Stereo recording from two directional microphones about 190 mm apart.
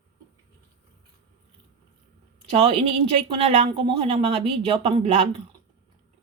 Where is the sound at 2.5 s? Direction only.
30° right (ahead or behind).